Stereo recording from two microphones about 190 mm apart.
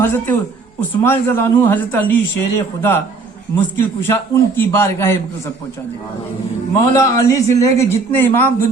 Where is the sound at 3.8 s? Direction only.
10° left (ahead or behind).